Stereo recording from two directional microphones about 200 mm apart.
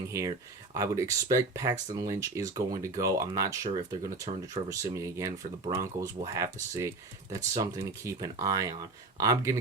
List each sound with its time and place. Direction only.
0.1 s speech: 15° right (ahead or behind)